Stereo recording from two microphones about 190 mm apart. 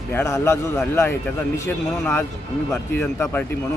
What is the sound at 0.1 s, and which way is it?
A man's voice, 15° left (ahead or behind).